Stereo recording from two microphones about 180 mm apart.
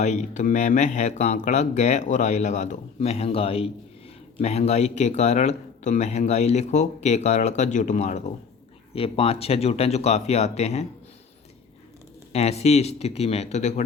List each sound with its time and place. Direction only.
0.0 s speech: 40° left (ahead or behind)
12.3 s speech: 35° left (ahead or behind)